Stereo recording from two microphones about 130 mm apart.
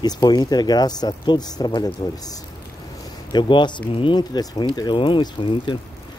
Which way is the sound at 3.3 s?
35° left (ahead or behind).